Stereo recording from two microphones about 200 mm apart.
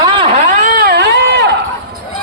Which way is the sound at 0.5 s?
45° right (ahead or behind).